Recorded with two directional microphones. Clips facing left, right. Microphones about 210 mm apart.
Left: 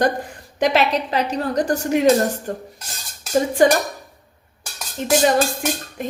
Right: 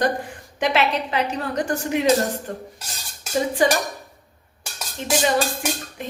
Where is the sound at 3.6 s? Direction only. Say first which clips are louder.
Left 5 dB; 45° left (ahead or behind).